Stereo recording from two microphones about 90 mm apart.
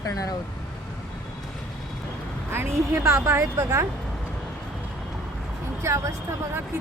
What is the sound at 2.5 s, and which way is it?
A woman's voice, 30° right (ahead or behind).